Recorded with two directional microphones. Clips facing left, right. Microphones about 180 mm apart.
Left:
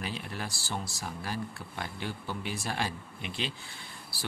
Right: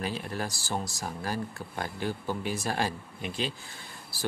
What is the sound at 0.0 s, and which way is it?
Speech, 40° right (ahead or behind).